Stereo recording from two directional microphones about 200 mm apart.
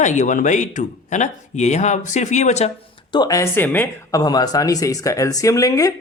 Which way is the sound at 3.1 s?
20° left (ahead or behind).